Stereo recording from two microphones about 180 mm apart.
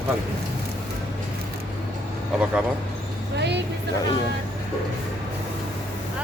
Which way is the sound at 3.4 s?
70° right (ahead or behind).